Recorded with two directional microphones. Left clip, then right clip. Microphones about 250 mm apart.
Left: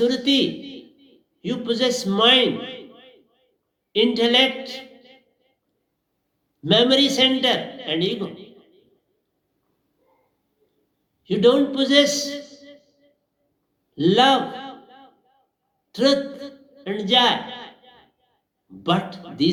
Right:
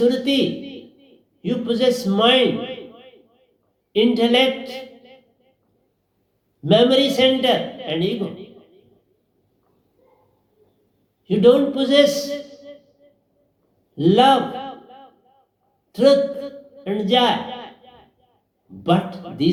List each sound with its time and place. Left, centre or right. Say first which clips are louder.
0.0 s a sound: right 1 dB; left
3.9 s a man's voice: right 1 dB; left
6.6 s a man's voice: right 2 dB; left
11.3 s a man's voice: right 3 dB; left
13.9 s a sound: right 2 dB; left
18.8 s a man's voice: right 3 dB; left